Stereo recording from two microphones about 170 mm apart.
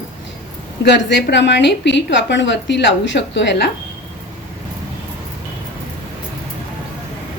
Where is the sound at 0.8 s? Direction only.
90° left.